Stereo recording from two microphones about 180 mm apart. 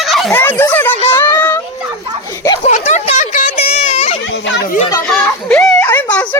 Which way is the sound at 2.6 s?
40° left (ahead or behind).